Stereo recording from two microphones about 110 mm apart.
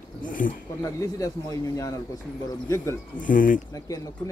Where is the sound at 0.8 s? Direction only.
30° left (ahead or behind).